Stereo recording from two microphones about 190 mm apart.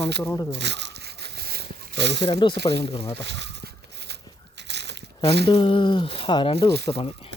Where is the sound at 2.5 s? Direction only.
60° right (ahead or behind).